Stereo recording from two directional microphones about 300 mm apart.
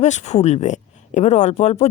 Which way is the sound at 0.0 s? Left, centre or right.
Left.